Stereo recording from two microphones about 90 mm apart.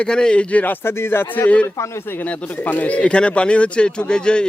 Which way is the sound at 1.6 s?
30° left (ahead or behind).